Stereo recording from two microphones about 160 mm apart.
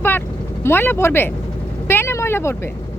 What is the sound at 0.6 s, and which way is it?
Speech, 15° left (ahead or behind).